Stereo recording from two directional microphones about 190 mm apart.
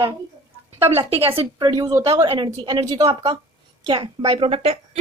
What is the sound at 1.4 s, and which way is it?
A woman's voice, 25° right (ahead or behind).